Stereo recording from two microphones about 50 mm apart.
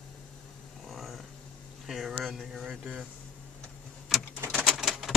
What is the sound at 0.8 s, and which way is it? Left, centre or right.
Vehicle, centre.